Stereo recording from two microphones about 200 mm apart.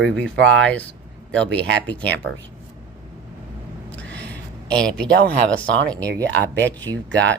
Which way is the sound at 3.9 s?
5° left (ahead or behind).